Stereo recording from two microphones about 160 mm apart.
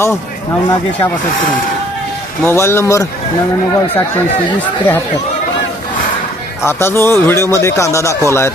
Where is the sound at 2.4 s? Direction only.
15° left (ahead or behind).